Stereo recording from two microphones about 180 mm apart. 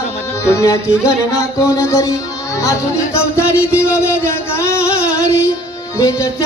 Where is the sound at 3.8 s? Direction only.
15° left (ahead or behind).